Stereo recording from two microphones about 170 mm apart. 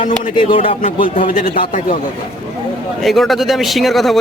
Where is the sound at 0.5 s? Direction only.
35° left (ahead or behind).